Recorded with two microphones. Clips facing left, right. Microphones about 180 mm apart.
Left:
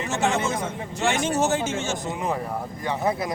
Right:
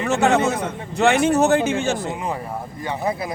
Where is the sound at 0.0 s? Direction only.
60° right (ahead or behind).